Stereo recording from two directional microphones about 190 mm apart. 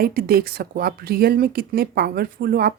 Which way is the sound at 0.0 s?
50° right (ahead or behind).